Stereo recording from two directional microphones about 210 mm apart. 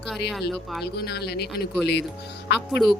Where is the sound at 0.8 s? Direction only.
50° left (ahead or behind).